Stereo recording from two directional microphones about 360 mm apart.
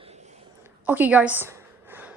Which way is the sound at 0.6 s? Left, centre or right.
Centre.